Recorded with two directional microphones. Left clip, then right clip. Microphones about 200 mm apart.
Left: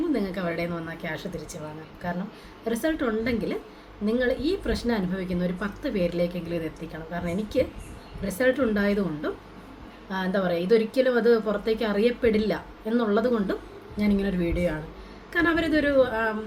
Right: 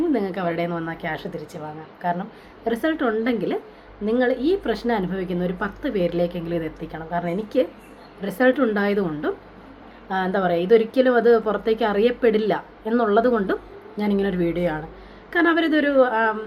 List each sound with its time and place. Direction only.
0.1 s a woman's voice: 5° left (ahead or behind)